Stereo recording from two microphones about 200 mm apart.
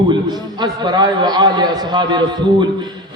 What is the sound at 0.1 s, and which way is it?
A man's voice, 20° right (ahead or behind).